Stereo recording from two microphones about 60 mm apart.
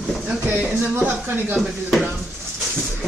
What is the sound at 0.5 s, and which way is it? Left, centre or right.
Speech, right.